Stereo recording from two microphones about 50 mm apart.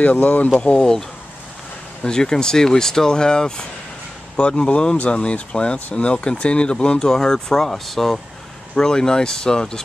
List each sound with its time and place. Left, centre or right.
0.0 s speech: left
0.7 s speech: centre
2.0 s speech: centre